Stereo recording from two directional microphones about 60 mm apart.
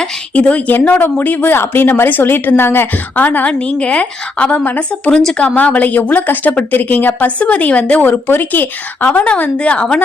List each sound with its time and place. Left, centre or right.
0.3 s a woman's voice: left
5.1 s a woman's voice: centre
5.5 s a woman's voice: left